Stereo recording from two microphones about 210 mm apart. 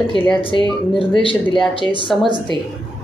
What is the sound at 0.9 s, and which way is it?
A woman's voice, 25° left (ahead or behind).